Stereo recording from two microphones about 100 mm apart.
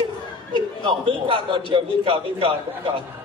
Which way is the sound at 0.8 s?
65° right (ahead or behind).